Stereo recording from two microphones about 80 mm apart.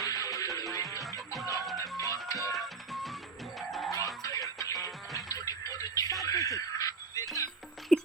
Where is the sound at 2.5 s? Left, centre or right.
Centre.